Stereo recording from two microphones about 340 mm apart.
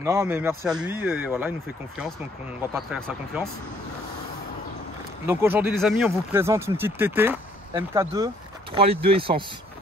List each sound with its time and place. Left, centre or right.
0.0 s a man's voice: centre
2.7 s a man's voice: centre
5.2 s speech: centre